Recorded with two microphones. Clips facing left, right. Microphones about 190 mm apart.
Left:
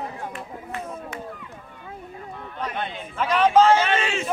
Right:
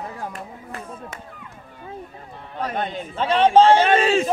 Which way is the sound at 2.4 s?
40° right (ahead or behind).